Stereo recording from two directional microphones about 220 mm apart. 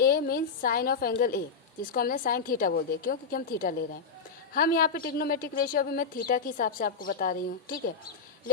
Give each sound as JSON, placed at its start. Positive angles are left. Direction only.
{"t": 0.0, "sound": "a woman's voice", "side_deg": 45}